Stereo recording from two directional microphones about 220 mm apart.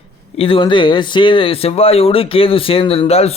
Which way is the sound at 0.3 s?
25° left (ahead or behind).